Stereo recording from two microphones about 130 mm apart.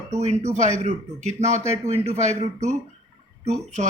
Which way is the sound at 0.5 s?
65° right (ahead or behind).